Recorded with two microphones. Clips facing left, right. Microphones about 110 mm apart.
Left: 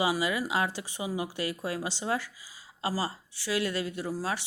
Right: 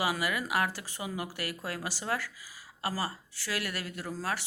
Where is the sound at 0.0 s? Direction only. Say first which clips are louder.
Left 3 dB; 20° left (ahead or behind).